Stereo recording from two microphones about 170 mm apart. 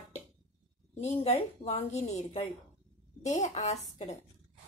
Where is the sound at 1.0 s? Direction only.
35° left (ahead or behind).